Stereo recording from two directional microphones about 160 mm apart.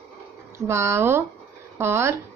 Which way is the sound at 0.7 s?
15° right (ahead or behind).